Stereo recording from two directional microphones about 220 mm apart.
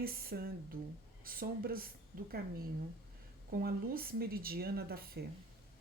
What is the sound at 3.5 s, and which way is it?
Speech, 45° right (ahead or behind).